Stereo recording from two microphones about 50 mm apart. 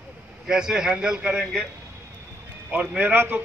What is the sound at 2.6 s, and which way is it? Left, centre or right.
Speech, right.